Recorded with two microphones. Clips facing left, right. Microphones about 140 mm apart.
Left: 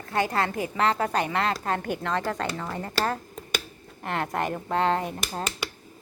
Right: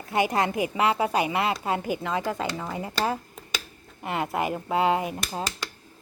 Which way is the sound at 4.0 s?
5° right (ahead or behind).